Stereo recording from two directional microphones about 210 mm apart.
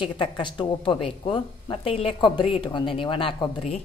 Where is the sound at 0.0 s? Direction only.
25° left (ahead or behind).